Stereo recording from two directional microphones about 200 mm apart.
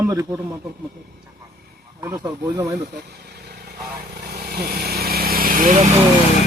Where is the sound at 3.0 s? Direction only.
55° right (ahead or behind).